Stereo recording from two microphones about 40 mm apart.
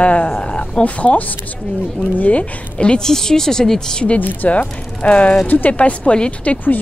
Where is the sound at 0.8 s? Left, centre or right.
Left.